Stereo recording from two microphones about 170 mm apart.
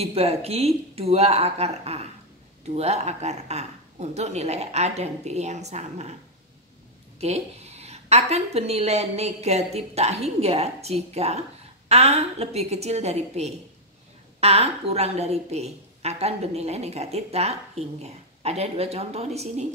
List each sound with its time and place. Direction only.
0.0 s a woman's voice: 35° right (ahead or behind)
7.2 s a woman's voice: 40° right (ahead or behind)